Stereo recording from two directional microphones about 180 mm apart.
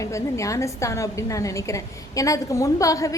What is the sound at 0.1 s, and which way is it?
A woman's voice, 15° left (ahead or behind).